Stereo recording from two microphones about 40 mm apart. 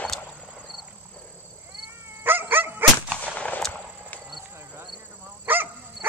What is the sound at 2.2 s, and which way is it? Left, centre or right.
Dog, right.